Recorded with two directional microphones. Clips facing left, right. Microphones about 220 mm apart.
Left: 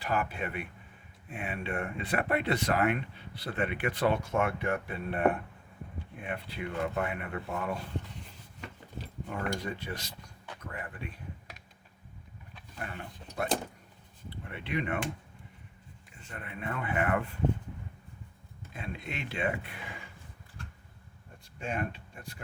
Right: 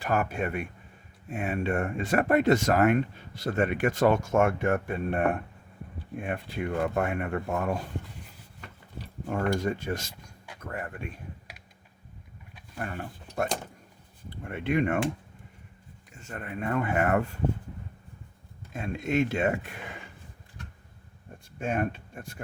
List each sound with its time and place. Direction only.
0.0 s speech: 45° right (ahead or behind)
9.2 s speech: 45° right (ahead or behind)
12.8 s speech: 45° right (ahead or behind)
16.1 s speech: 45° right (ahead or behind)
18.7 s speech: 45° right (ahead or behind)
21.6 s speech: 50° right (ahead or behind)